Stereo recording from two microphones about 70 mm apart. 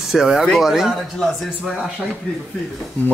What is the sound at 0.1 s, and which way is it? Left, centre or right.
Speech, centre.